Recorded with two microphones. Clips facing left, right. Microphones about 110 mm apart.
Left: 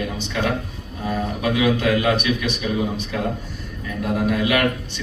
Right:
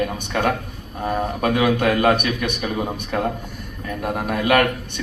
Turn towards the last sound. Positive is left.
turn(degrees=-50)  # may be behind; listen again after turning